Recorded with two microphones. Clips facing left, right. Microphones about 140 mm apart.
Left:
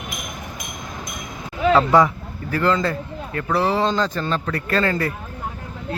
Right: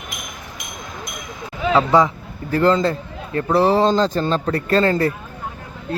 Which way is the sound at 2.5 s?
30° right (ahead or behind).